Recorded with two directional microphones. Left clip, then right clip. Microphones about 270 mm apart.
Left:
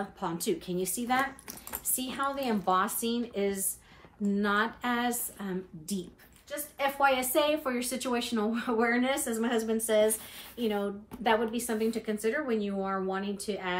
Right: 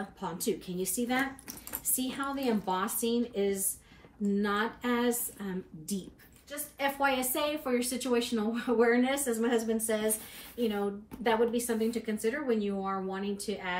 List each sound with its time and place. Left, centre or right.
0.2 s speech: centre
7.0 s speech: centre